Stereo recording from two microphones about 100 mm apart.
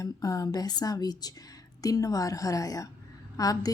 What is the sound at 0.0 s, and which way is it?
A woman's voice, 40° left (ahead or behind).